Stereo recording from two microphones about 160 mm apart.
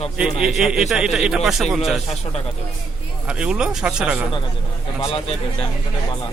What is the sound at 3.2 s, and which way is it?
A man's voice, 5° right (ahead or behind).